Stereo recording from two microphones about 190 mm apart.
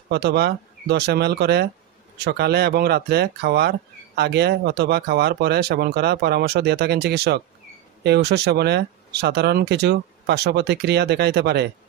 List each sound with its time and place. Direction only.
0.1 s speech: 60° right (ahead or behind)